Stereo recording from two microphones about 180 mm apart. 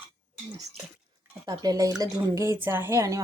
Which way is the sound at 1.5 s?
20° right (ahead or behind).